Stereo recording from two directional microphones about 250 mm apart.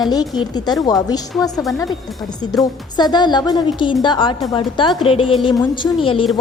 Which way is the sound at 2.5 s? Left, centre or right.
Centre.